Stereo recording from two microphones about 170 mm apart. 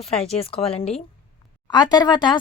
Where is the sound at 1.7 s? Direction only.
25° left (ahead or behind).